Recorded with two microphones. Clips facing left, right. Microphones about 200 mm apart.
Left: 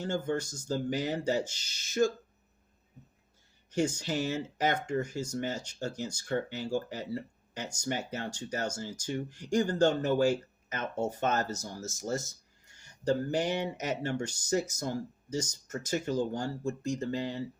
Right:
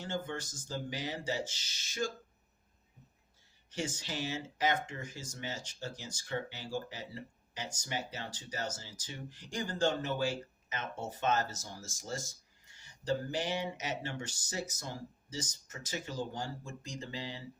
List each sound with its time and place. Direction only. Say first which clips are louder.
0.0 s speech: left 7 dB; 45° left (ahead or behind)
3.7 s speech: left 9 dB; 45° left (ahead or behind)
11.5 s speech: left 7 dB; 55° left (ahead or behind)
11.8 s speech: left 7 dB; 40° left (ahead or behind)